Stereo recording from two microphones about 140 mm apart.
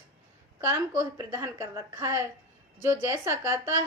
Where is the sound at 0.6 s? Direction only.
20° right (ahead or behind).